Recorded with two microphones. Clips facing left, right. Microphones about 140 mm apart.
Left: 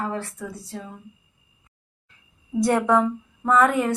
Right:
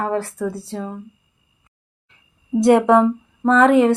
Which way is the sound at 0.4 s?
30° right (ahead or behind).